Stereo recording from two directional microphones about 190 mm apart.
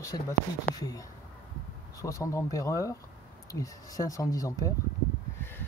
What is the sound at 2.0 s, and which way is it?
Speech, 15° left (ahead or behind).